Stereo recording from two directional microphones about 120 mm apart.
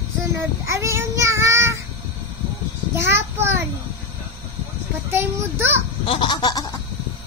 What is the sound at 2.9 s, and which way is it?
Speech, 20° right (ahead or behind).